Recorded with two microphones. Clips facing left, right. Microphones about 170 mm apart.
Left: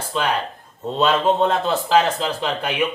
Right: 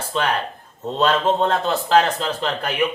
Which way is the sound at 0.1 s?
5° left (ahead or behind).